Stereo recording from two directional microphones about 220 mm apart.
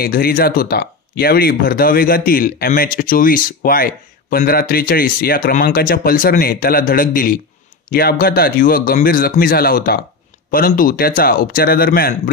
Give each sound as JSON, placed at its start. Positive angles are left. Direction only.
{"t": 0.0, "sound": "speech", "side_deg": 40}